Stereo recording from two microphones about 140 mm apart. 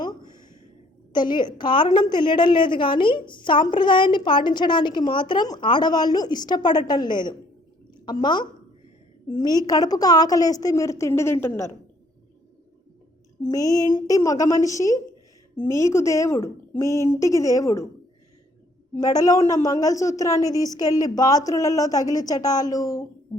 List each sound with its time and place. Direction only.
0.0 s a sound: 30° left (ahead or behind)
1.1 s a woman's voice: 30° left (ahead or behind); by 11.7 s 15° left (ahead or behind)
13.5 s a woman's voice: 25° left (ahead or behind)
18.9 s a woman's voice: 25° left (ahead or behind)